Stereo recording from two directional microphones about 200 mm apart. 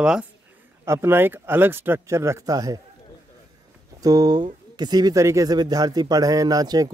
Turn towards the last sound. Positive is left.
turn(degrees=-20)  # may be behind; listen again after turning